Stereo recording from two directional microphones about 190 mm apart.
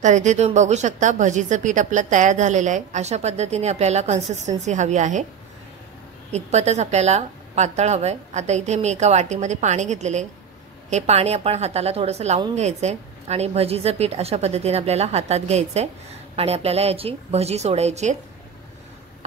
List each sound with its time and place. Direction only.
0.0 s a woman's voice: 40° right (ahead or behind)
6.3 s a woman's voice: 35° right (ahead or behind)